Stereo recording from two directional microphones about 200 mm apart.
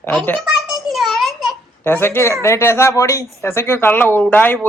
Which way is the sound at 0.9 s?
Centre (ahead or behind).